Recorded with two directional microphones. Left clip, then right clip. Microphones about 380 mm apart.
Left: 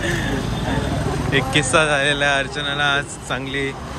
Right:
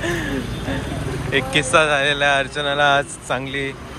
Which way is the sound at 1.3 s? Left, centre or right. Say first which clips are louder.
Right 1 dB; centre.